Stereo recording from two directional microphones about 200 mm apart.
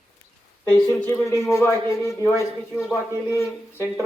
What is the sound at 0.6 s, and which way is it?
A man's voice, 10° left (ahead or behind).